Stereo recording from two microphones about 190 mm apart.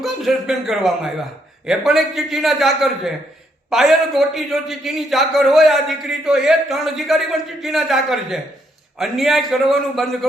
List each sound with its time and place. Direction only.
0.0 s a man's voice: centre (ahead or behind)